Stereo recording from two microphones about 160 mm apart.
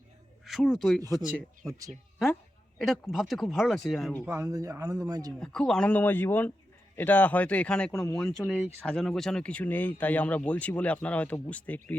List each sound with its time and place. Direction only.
0.4 s a man's voice: centre (ahead or behind)
4.4 s speech: 20° right (ahead or behind)
5.4 s speech: 5° left (ahead or behind)